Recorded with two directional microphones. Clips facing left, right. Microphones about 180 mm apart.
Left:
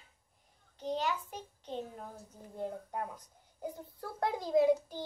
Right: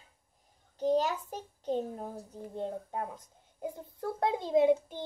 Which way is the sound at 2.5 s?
25° right (ahead or behind).